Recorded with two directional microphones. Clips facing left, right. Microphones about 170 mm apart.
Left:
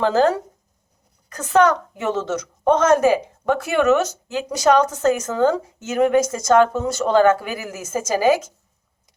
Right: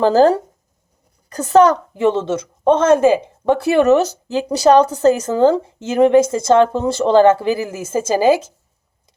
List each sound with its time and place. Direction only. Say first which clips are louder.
0.0 s a woman's voice: right 5 dB; 35° right (ahead or behind)